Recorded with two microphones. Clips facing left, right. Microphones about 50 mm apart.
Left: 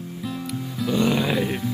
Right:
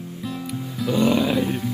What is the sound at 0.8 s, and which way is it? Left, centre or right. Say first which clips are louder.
Music: right 2 dB; centre.